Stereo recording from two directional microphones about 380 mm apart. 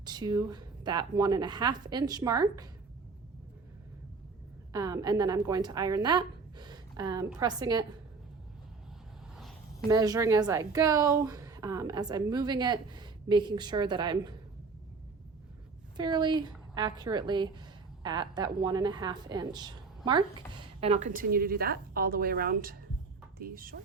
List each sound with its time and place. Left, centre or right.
0.0 s a woman's voice: centre
4.7 s a woman's voice: centre
9.3 s a woman's voice: centre
16.0 s a woman's voice: centre